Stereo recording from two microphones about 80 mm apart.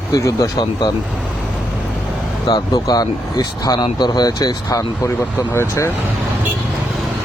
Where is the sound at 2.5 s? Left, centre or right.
Left.